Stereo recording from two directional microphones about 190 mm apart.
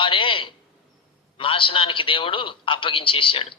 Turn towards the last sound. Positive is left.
turn(degrees=25)  # may be behind; listen again after turning